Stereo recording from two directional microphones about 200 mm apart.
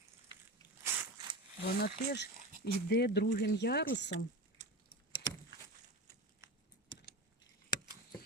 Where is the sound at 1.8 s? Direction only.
55° left (ahead or behind).